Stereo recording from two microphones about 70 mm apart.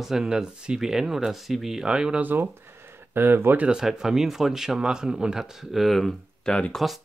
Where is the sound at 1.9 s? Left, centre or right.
Centre.